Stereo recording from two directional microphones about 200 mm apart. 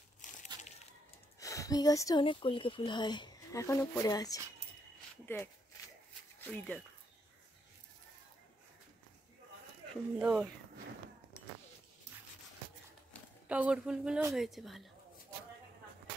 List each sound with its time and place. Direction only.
0.2 s crumpling: 35° left (ahead or behind)
1.4 s speech: 15° left (ahead or behind)
10.1 s speech: 5° right (ahead or behind)
13.5 s speech: 5° right (ahead or behind)